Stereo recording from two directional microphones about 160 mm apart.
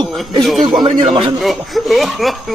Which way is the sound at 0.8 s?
30° right (ahead or behind).